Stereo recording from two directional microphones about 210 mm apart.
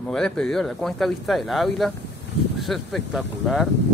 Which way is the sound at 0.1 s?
5° left (ahead or behind).